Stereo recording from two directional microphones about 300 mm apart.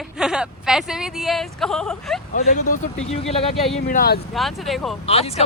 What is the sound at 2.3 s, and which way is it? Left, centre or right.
Speech, left.